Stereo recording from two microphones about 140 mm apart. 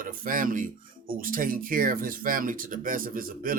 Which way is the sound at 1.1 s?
90° right.